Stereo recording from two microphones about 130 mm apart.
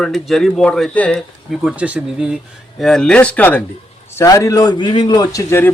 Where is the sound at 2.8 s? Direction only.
5° left (ahead or behind).